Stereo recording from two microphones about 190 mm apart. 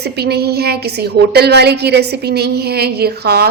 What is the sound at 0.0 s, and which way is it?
A woman's voice, 60° right (ahead or behind).